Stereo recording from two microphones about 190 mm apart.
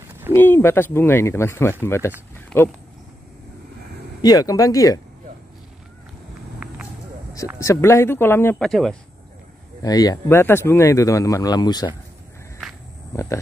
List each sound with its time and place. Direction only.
0.3 s speech: 10° left (ahead or behind)
4.2 s speech: 20° left (ahead or behind)
7.5 s speech: 15° left (ahead or behind)
9.8 s speech: 20° left (ahead or behind)
13.1 s speech: 15° left (ahead or behind)